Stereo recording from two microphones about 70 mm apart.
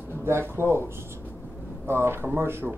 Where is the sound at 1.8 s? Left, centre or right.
Right.